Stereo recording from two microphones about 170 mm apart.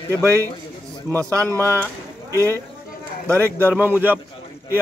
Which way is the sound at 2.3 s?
15° right (ahead or behind).